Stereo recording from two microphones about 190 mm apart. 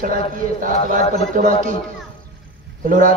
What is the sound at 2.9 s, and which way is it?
Speech, 40° right (ahead or behind).